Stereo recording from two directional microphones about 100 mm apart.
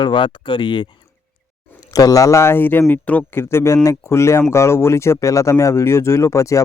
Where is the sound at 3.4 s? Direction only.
25° left (ahead or behind).